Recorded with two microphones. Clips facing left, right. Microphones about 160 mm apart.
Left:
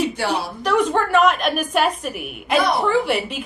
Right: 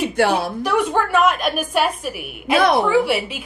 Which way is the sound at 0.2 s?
55° right (ahead or behind).